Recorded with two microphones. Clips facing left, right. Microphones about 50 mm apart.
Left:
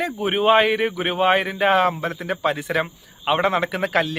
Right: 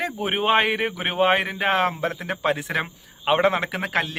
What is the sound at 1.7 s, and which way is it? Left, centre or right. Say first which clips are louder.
A man's voice: left 3 dB; right.